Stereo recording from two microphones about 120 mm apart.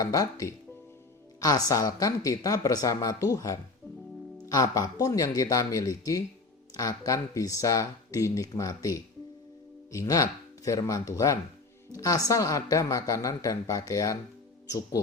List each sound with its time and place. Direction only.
0.0 s a woman's voice: 30° left (ahead or behind)